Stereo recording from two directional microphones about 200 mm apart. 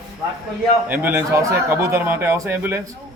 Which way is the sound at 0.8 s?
10° right (ahead or behind).